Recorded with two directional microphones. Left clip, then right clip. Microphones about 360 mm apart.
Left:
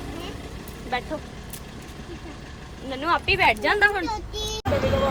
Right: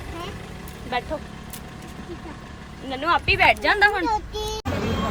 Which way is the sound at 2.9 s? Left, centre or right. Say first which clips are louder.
Right 2 dB; centre.